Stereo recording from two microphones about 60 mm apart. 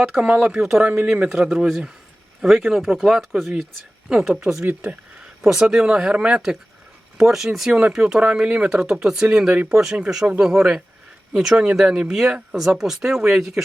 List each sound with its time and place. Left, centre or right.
0.1 s speech: centre
0.5 s speech: centre
0.8 s speech: right
1.3 s speech: centre
4.1 s speech: centre
4.6 s speech: right
5.2 s speech: centre